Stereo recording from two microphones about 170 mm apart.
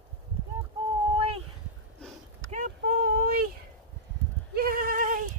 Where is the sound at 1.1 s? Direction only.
35° right (ahead or behind).